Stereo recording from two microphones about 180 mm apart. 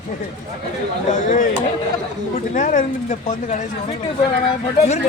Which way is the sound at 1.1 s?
45° left (ahead or behind).